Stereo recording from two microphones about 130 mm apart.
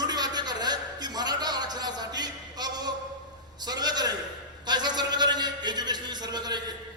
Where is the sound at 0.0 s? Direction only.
30° right (ahead or behind).